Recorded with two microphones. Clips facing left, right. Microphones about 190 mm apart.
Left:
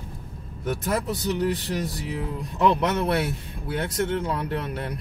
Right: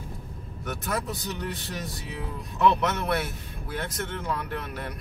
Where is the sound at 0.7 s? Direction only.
30° left (ahead or behind).